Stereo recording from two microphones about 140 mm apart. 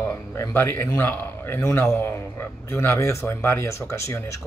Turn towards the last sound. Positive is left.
turn(degrees=20)  # may be behind; listen again after turning